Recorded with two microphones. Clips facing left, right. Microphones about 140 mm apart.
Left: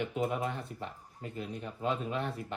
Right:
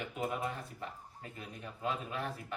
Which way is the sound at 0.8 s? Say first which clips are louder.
Left 3 dB; 30° left (ahead or behind).